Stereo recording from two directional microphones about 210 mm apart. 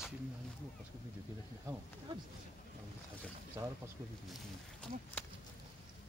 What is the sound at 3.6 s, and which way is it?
Speech, 15° right (ahead or behind).